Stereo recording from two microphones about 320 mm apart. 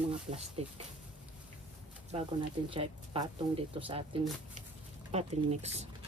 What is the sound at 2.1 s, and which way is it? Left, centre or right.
Speech, centre.